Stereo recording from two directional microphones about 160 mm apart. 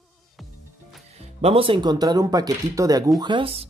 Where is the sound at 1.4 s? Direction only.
35° right (ahead or behind); by 3.1 s 20° right (ahead or behind).